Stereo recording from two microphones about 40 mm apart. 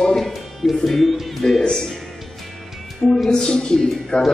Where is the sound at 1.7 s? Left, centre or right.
Centre.